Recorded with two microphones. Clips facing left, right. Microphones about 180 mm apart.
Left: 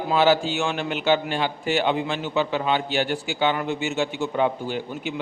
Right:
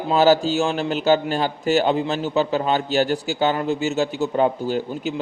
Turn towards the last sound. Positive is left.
turn(degrees=-40)  # may be behind; listen again after turning